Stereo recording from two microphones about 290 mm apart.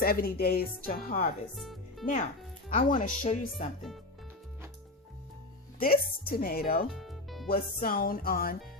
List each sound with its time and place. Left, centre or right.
0.0 s a woman's voice: left
1.5 s speech: centre
2.6 s speech: left
5.8 s a woman's voice: left
6.9 s music: centre
7.4 s speech: left